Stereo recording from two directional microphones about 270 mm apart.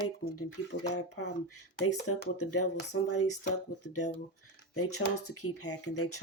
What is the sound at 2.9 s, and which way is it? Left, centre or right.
Speech, left.